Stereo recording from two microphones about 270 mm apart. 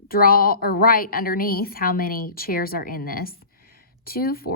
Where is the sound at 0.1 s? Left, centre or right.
Left.